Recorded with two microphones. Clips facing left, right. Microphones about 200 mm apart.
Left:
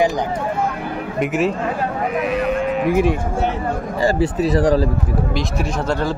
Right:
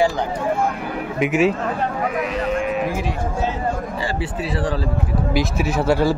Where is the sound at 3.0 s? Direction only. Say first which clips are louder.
Left 6 dB; 60° left (ahead or behind).